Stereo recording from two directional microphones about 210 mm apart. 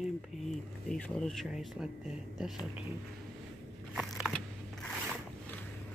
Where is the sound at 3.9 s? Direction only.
Centre (ahead or behind).